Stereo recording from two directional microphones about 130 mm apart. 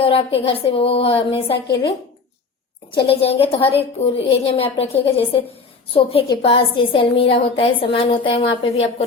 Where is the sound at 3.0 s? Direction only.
50° left (ahead or behind).